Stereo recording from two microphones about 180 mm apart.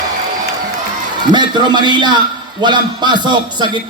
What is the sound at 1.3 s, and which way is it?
A man's voice, 25° right (ahead or behind).